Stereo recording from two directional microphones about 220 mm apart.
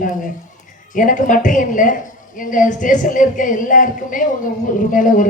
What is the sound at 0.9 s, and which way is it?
A woman's voice, 35° left (ahead or behind).